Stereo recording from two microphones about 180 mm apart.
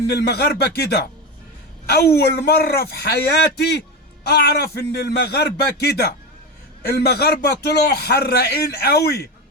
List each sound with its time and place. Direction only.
0.1 s a man's voice: 65° left (ahead or behind)